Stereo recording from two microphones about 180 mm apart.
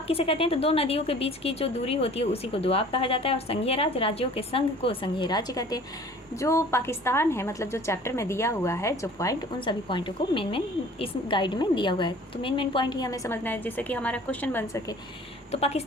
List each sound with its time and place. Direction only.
0.1 s a woman's voice: 30° left (ahead or behind); by 14.9 s 15° left (ahead or behind)